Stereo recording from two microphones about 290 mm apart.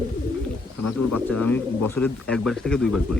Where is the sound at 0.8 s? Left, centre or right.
Left.